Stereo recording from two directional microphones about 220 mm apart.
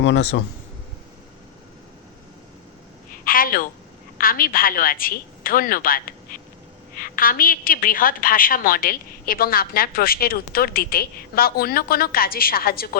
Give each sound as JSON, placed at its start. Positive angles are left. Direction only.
{"t": 0.0, "sound": "a woman's voice", "side_deg": 50}
{"t": 3.1, "sound": "a sound", "side_deg": 40}
{"t": 4.2, "sound": "a woman's voice", "side_deg": 40}